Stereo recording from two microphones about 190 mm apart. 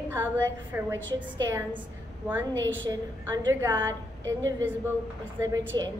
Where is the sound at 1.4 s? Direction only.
20° right (ahead or behind).